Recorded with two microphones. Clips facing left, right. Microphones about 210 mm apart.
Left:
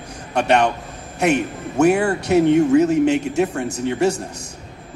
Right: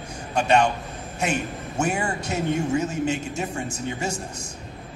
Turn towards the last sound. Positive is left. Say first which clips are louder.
# left 10 dB
turn(degrees=65)  # may be behind; listen again after turning